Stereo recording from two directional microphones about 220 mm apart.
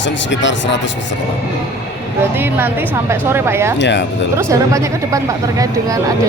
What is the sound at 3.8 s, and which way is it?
Speech, 55° left (ahead or behind).